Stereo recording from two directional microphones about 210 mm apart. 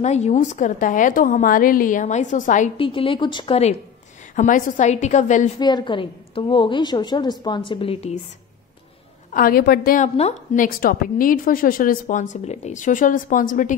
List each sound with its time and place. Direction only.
0.0 s a woman's voice: 35° left (ahead or behind)
2.8 s a woman's voice: 25° left (ahead or behind)
4.4 s a woman's voice: 40° left (ahead or behind)
5.6 s a woman's voice: 20° left (ahead or behind)
9.3 s a woman's voice: 45° left (ahead or behind)